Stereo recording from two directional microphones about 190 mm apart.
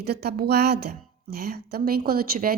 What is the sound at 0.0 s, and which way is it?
A woman's voice, 55° right (ahead or behind).